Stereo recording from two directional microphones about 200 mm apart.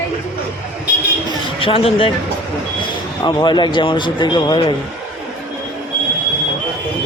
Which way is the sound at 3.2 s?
20° left (ahead or behind).